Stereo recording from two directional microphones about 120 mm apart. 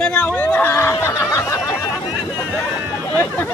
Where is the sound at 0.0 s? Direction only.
10° left (ahead or behind).